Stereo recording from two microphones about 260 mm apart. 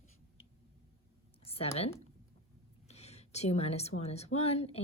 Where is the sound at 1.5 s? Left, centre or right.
Left.